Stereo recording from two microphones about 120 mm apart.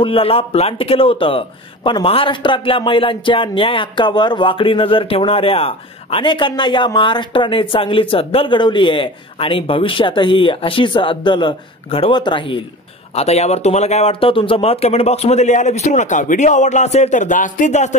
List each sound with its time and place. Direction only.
0.0 s a man's voice: 50° left (ahead or behind)
13.1 s speech: 60° left (ahead or behind); by 17.9 s 80° left